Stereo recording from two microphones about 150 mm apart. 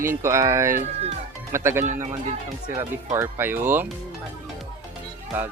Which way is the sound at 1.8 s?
60° right (ahead or behind).